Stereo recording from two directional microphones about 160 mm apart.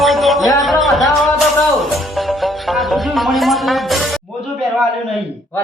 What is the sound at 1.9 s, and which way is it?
Music, centre (ahead or behind).